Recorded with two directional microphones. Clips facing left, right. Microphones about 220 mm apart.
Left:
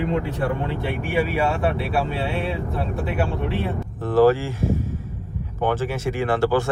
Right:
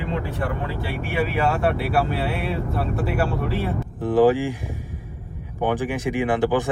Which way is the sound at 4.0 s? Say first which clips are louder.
Even; 15° right (ahead or behind).